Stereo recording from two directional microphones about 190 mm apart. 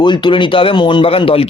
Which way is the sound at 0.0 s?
25° left (ahead or behind).